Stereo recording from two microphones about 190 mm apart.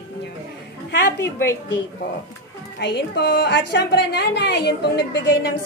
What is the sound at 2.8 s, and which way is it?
A woman's voice, 65° left (ahead or behind).